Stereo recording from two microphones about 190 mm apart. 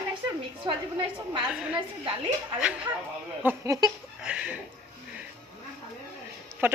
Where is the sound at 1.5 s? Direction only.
5° right (ahead or behind).